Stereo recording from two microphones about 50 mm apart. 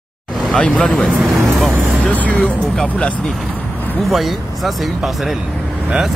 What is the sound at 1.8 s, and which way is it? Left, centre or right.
Vehicle, centre.